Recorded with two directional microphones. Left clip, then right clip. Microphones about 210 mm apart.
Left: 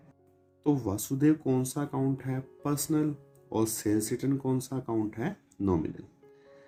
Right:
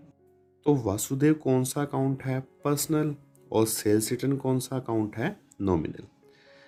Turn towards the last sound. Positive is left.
turn(degrees=-50)  # may be behind; listen again after turning